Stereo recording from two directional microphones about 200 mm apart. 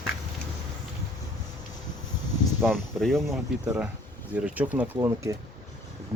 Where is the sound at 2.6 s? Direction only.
Centre (ahead or behind).